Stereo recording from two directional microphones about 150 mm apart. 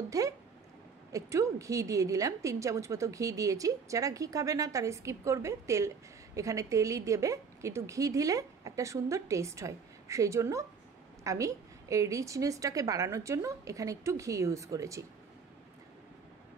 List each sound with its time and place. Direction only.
0.1 s a woman's voice: 20° right (ahead or behind)